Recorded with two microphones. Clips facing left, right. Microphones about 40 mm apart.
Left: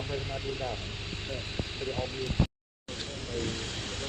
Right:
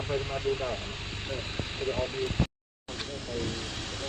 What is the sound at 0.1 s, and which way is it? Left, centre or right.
Speech, centre.